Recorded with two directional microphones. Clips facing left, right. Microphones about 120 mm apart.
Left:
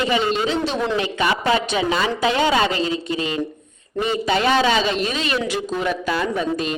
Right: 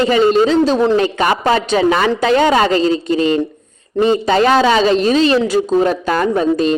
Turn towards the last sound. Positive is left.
turn(degrees=-35)  # may be behind; listen again after turning